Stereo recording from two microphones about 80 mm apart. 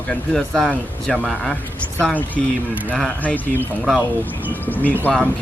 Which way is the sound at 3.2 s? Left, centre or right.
Centre.